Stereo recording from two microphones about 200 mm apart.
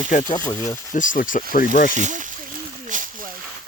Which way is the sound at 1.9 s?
40° right (ahead or behind).